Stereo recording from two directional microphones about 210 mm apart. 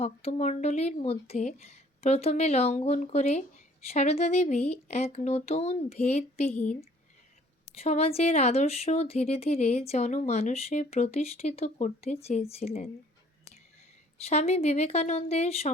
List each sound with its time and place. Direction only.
0.0 s speech: 30° left (ahead or behind)
7.8 s speech: 30° left (ahead or behind)
14.3 s speech: 30° left (ahead or behind)